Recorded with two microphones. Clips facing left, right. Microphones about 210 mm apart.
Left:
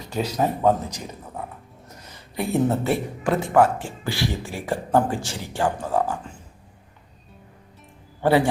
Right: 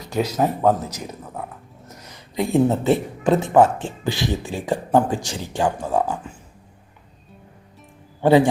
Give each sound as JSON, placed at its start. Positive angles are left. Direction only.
{"t": 0.0, "sound": "a sound", "side_deg": -10}
{"t": 0.3, "sound": "speech", "side_deg": -5}
{"t": 8.2, "sound": "speech", "side_deg": -15}